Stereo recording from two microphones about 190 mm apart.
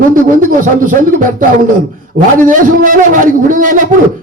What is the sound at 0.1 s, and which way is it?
A man's voice, 45° right (ahead or behind).